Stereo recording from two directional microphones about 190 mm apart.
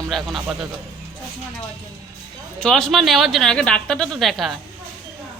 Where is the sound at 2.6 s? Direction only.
5° left (ahead or behind).